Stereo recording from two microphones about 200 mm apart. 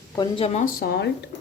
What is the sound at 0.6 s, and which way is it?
Speech, 50° left (ahead or behind).